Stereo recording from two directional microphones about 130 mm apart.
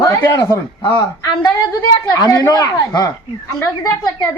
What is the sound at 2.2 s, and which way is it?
Speech, 25° left (ahead or behind).